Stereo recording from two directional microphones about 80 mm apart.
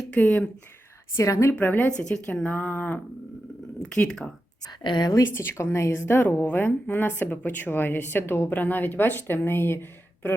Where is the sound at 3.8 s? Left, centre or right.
Centre.